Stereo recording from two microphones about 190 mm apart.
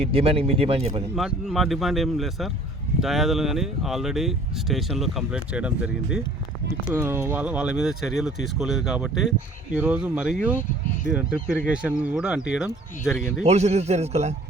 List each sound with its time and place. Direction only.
0.0 s speech: 30° right (ahead or behind)
1.1 s speech: centre (ahead or behind)
13.4 s speech: 35° right (ahead or behind)